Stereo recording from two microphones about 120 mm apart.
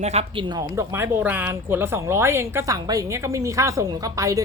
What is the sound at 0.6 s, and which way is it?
Speech, 25° right (ahead or behind).